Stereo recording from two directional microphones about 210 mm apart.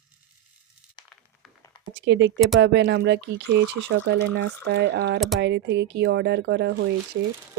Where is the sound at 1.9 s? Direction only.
55° right (ahead or behind).